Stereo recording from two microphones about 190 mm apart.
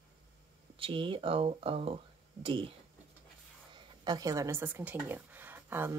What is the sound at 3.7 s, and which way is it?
Speech, 20° right (ahead or behind).